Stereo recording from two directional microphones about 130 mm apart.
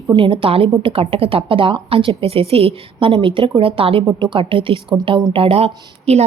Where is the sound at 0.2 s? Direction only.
40° right (ahead or behind).